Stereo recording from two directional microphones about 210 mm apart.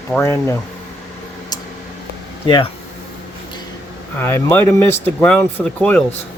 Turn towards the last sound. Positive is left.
turn(degrees=10)  # may be behind; listen again after turning